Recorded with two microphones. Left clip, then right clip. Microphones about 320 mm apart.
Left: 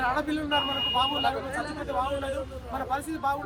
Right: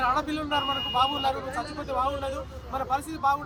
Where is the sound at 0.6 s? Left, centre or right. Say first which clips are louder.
Right 1 dB; right.